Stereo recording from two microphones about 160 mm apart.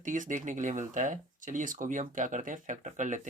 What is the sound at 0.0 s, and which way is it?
Speech, 55° right (ahead or behind).